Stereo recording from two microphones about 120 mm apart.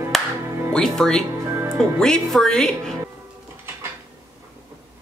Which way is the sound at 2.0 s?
5° left (ahead or behind).